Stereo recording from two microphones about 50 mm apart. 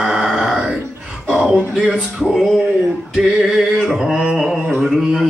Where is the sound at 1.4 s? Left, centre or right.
Centre.